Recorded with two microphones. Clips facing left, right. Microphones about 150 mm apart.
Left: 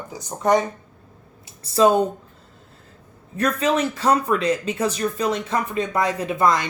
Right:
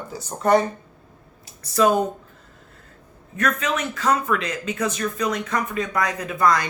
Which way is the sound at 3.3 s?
30° left (ahead or behind).